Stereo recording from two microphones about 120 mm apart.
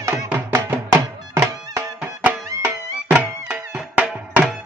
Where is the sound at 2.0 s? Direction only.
15° right (ahead or behind).